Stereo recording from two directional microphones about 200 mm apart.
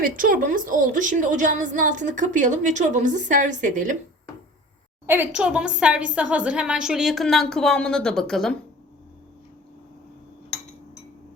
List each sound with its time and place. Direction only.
0.0 s a woman's voice: 45° right (ahead or behind)
5.0 s a woman's voice: 10° right (ahead or behind)